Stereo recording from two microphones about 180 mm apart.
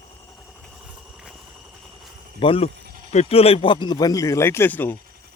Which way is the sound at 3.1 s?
35° left (ahead or behind).